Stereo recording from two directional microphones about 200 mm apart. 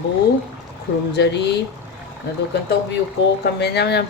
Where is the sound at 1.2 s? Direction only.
60° left (ahead or behind).